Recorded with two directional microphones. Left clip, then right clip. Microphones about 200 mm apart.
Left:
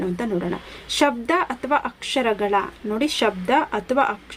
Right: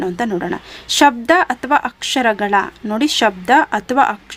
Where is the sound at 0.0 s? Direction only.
45° right (ahead or behind).